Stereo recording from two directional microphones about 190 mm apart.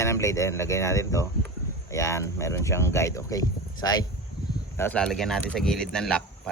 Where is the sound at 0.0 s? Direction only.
15° left (ahead or behind).